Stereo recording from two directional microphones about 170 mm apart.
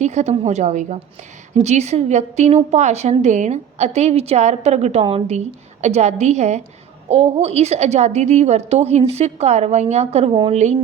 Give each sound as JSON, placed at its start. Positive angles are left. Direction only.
{"t": 0.0, "sound": "a woman's voice", "side_deg": -45}